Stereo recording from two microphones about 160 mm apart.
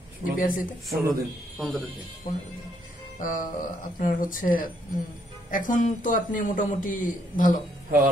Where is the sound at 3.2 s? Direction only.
55° left (ahead or behind).